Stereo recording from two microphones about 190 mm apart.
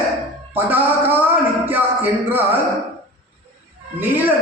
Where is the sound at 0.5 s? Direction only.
10° right (ahead or behind).